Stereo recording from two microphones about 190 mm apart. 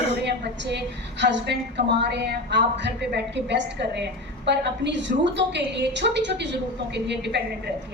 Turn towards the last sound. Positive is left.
turn(degrees=-65)  # may be behind; listen again after turning